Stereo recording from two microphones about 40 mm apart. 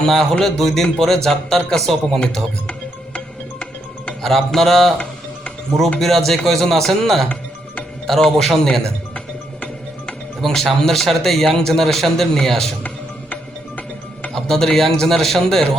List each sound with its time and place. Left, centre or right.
0.0 s speech: centre
4.2 s speech: centre
6.0 s speech: centre
10.4 s speech: centre
13.3 s music: left
14.3 s speech: centre